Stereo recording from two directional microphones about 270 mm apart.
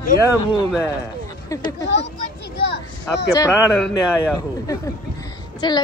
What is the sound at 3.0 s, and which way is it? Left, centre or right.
A woman's voice, centre.